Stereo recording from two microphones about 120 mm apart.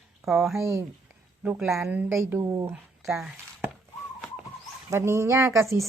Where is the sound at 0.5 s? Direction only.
25° right (ahead or behind).